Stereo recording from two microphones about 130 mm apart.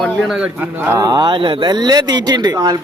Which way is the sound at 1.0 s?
30° right (ahead or behind).